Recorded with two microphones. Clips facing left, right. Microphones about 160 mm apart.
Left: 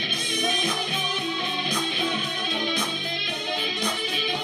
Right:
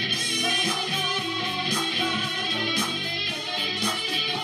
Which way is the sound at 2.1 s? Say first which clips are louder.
Left 1 dB; 20° left (ahead or behind).